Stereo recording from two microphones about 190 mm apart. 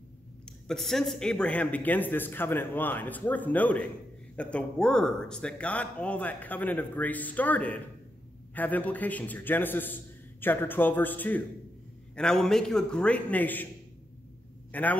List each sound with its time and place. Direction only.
0.7 s a man's voice: centre (ahead or behind)
14.7 s speech: 10° left (ahead or behind)